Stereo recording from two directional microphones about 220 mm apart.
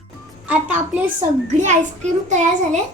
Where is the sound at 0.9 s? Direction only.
10° right (ahead or behind).